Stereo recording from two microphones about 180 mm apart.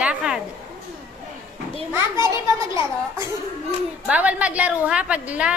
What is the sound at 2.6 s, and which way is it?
A woman's voice, 15° right (ahead or behind).